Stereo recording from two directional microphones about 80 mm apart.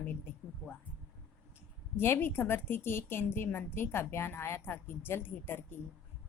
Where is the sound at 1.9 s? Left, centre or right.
Left.